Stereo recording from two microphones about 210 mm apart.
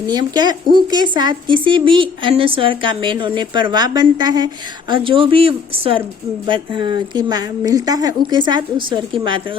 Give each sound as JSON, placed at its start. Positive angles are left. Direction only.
{"t": 0.1, "sound": "speech", "side_deg": -20}